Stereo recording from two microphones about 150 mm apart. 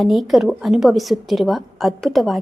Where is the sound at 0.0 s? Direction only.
Centre (ahead or behind).